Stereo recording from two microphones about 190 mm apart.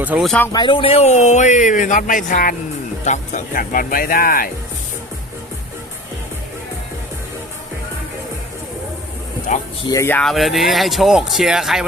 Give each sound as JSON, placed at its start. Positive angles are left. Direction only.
{"t": 0.0, "sound": "speech", "side_deg": -10}
{"t": 0.3, "sound": "speech", "side_deg": 10}
{"t": 0.5, "sound": "speech", "side_deg": 25}
{"t": 9.5, "sound": "speech", "side_deg": 40}
{"t": 9.9, "sound": "speech", "side_deg": 10}